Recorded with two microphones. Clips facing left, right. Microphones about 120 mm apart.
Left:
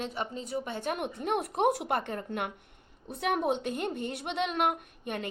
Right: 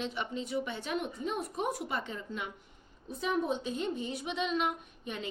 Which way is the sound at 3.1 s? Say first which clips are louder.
Left 3 dB; 70° left (ahead or behind).